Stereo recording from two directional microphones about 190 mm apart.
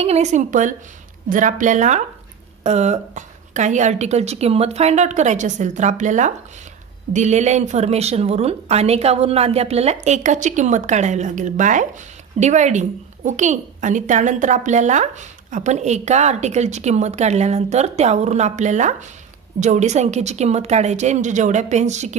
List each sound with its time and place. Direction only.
0.0 s speech: 35° right (ahead or behind)